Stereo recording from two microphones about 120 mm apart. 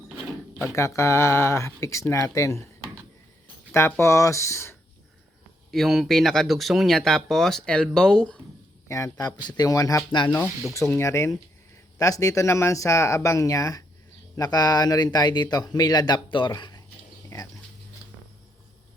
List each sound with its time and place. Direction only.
0.6 s speech: 25° left (ahead or behind)
3.7 s speech: 15° left (ahead or behind)
5.7 s speech: centre (ahead or behind)
8.9 s speech: 25° left (ahead or behind)
17.2 s a sound: 25° left (ahead or behind)